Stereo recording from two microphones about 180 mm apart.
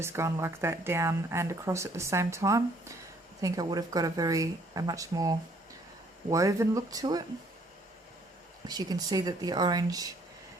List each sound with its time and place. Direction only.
0.0 s speech: 15° right (ahead or behind)
8.6 s speech: 20° right (ahead or behind)